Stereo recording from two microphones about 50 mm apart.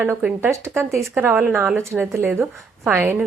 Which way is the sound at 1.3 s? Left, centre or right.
Right.